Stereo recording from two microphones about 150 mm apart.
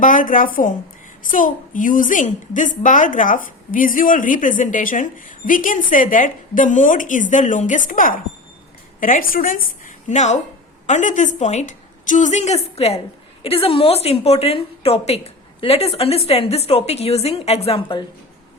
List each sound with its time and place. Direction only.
0.0 s a woman's voice: 60° left (ahead or behind); by 18.0 s 40° left (ahead or behind)